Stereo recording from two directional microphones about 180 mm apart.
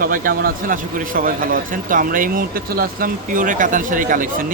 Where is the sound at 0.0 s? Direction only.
50° right (ahead or behind).